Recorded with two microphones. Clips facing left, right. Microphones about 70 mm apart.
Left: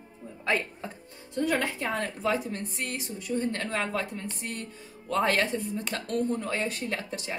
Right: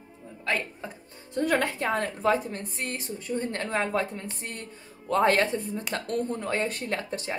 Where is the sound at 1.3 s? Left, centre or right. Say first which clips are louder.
Right 2 dB; right.